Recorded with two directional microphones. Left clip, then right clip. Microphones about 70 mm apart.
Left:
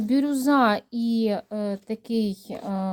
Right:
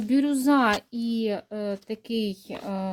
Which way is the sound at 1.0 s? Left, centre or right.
Left.